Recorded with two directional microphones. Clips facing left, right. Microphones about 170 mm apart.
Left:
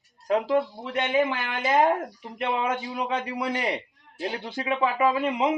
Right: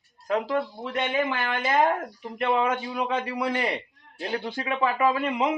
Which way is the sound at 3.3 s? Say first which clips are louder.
Right 1 dB; 15° left (ahead or behind).